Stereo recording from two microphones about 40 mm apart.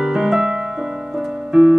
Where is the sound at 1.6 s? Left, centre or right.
Centre.